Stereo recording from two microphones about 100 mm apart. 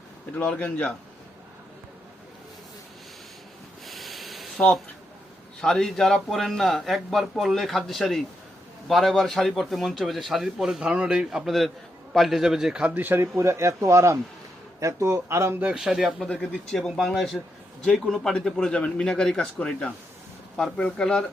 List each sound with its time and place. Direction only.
0.3 s speech: 15° left (ahead or behind)
3.8 s a sound: centre (ahead or behind)
5.5 s a man's voice: 5° left (ahead or behind); by 15.7 s 25° right (ahead or behind)
15.7 s a man's voice: 5° right (ahead or behind)
16.3 s speech: 15° left (ahead or behind)
16.6 s a man's voice: centre (ahead or behind)